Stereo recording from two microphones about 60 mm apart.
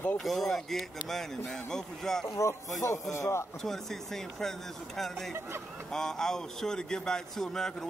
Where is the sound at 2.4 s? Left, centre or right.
Left.